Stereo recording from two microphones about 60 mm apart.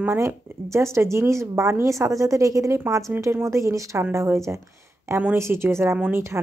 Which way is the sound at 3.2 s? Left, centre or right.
Right.